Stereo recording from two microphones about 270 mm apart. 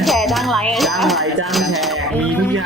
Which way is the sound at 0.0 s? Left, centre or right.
Centre.